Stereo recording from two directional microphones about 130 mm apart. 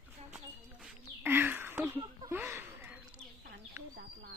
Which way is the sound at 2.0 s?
30° right (ahead or behind).